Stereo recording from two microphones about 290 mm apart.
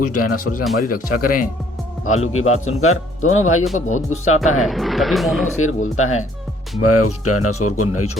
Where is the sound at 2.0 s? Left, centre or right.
Left.